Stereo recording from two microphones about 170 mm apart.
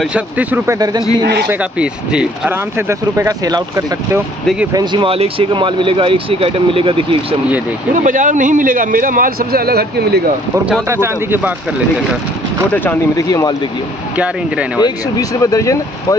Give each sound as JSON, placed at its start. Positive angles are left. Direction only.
{"t": 0.0, "sound": "speech", "side_deg": -10}
{"t": 0.7, "sound": "a man's voice", "side_deg": -25}
{"t": 1.5, "sound": "speech", "side_deg": -5}
{"t": 2.9, "sound": "speech", "side_deg": -20}
{"t": 7.9, "sound": "a man's voice", "side_deg": -50}
{"t": 10.5, "sound": "speech", "side_deg": -10}
{"t": 12.7, "sound": "speech", "side_deg": 15}
{"t": 14.1, "sound": "speech", "side_deg": -5}
{"t": 14.8, "sound": "speech", "side_deg": 20}